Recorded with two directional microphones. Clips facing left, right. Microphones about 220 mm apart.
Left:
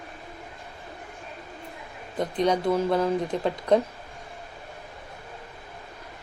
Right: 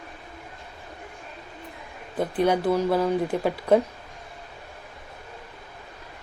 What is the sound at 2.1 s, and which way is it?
A woman's voice, 5° right (ahead or behind).